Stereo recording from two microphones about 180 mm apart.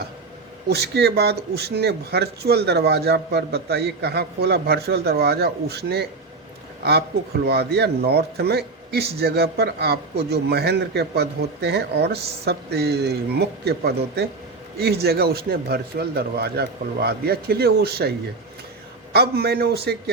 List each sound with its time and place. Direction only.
0.7 s a man's voice: 65° right (ahead or behind)
7.4 s a man's voice: 65° right (ahead or behind)
19.1 s a man's voice: 60° right (ahead or behind)